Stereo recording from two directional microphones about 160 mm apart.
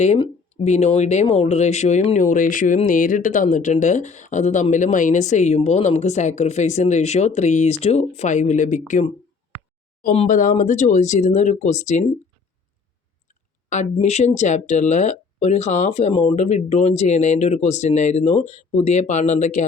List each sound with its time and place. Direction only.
0.5 s speech: 45° left (ahead or behind)
10.2 s speech: 55° left (ahead or behind)
13.9 s speech: 45° left (ahead or behind)